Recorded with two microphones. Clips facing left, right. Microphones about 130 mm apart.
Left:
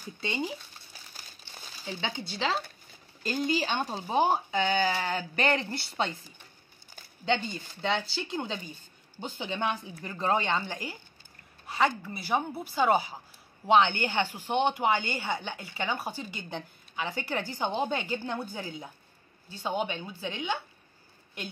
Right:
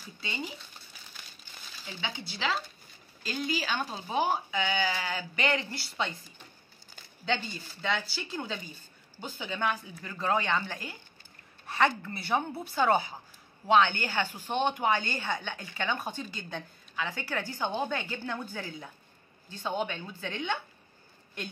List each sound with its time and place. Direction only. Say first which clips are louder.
0.2 s a woman's voice: left 5 dB; 30° left (ahead or behind)
4.6 s a sound: left 4 dB; 40° left (ahead or behind)
7.8 s a woman's voice: left 2 dB; 30° left (ahead or behind)
11.6 s a woman's voice: even; centre (ahead or behind)